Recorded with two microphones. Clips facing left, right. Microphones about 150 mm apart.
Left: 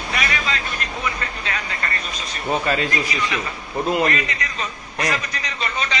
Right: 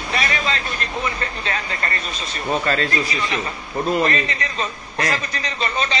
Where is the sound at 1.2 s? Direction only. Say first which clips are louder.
Right 2 dB; 35° right (ahead or behind).